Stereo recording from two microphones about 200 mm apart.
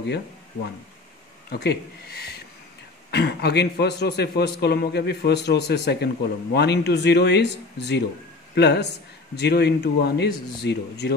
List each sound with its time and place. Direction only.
1.5 s a man's voice: 55° left (ahead or behind)